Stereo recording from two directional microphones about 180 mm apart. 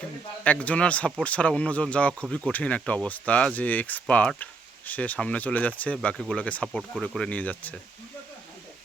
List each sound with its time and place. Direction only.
0.4 s speech: 10° left (ahead or behind)